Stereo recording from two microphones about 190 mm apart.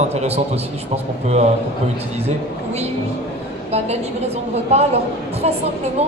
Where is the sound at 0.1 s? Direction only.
35° right (ahead or behind).